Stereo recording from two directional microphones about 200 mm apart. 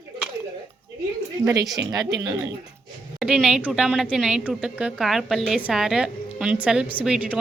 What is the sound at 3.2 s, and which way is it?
A woman's voice, 5° right (ahead or behind).